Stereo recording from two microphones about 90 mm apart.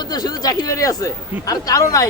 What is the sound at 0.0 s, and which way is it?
Speech, 50° left (ahead or behind).